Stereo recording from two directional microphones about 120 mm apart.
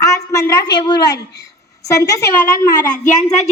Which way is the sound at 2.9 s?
90° left.